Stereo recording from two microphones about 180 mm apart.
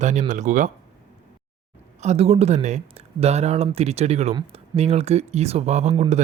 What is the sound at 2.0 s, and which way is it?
Speech, 35° right (ahead or behind).